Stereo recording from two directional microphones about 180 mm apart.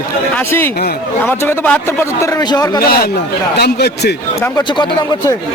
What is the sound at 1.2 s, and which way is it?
A man's voice, 10° left (ahead or behind).